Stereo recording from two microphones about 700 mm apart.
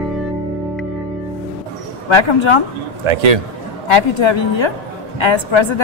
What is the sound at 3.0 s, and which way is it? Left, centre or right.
Speech, right.